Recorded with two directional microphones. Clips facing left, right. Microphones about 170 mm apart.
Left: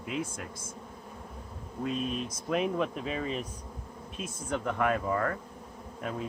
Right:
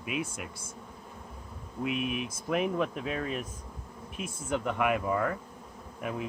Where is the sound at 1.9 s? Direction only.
70° right (ahead or behind).